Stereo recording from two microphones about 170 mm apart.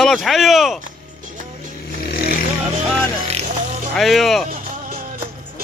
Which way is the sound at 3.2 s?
40° right (ahead or behind).